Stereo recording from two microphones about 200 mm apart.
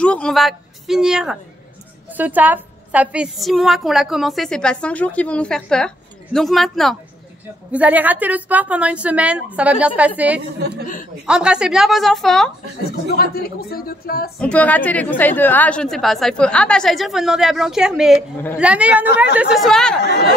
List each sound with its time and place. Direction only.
0.0 s a woman's voice: 5° left (ahead or behind)
13.1 s speech: 50° left (ahead or behind)
14.4 s a woman's voice: 5° left (ahead or behind)